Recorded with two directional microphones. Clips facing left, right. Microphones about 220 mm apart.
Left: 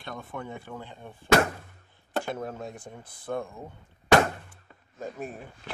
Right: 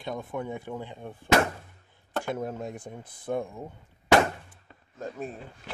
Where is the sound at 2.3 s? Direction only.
15° right (ahead or behind).